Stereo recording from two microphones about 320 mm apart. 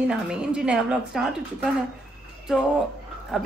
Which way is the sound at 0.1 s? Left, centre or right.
Centre.